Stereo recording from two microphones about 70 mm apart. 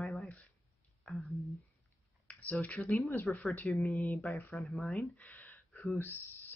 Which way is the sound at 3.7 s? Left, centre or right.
Centre.